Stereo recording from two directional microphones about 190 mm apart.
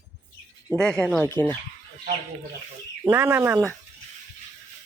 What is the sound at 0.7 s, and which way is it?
Speech, 5° left (ahead or behind).